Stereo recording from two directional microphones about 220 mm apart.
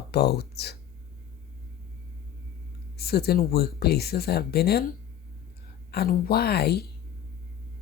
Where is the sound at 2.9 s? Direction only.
45° left (ahead or behind).